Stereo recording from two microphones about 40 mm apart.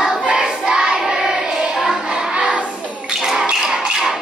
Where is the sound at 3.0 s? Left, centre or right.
Centre.